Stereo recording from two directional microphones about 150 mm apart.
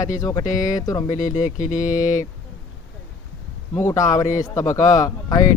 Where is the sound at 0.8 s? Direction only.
25° left (ahead or behind).